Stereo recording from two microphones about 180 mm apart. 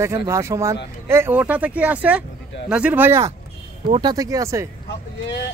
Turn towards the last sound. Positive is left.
turn(degrees=70)  # may be behind; listen again after turning